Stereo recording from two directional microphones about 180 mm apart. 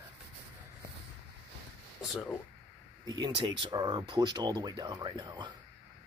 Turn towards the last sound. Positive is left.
turn(degrees=-25)  # may be behind; listen again after turning